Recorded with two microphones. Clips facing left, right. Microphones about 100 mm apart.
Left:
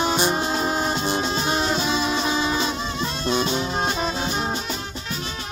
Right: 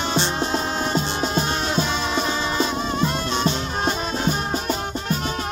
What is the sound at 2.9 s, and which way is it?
Music, 45° right (ahead or behind).